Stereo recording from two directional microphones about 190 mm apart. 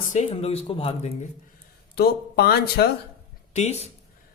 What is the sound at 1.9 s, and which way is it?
Speech, 55° left (ahead or behind).